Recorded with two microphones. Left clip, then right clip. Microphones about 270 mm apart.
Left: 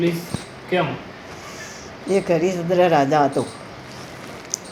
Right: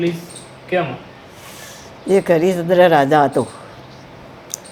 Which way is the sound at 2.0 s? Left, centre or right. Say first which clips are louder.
Right 5 dB; right.